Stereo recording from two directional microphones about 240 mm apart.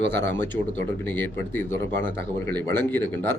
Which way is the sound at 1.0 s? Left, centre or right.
Centre.